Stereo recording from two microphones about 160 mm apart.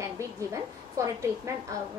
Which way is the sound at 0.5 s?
20° right (ahead or behind).